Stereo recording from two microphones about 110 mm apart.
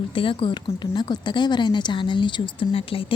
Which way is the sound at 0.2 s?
50° left (ahead or behind).